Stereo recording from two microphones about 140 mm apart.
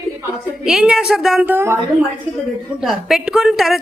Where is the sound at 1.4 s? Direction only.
15° right (ahead or behind).